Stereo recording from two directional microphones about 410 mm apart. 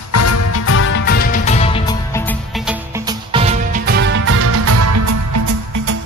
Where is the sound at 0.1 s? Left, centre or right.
Left.